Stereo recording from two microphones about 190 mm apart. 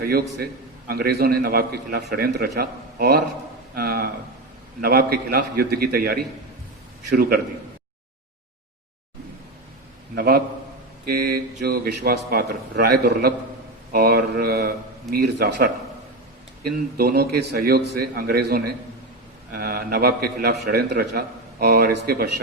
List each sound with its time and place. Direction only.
0.9 s a man's voice: 55° right (ahead or behind)
7.1 s mantra: 55° right (ahead or behind)
10.2 s a man's voice: 55° right (ahead or behind)
13.9 s mantra: 55° right (ahead or behind)
16.6 s a man's voice: 50° right (ahead or behind)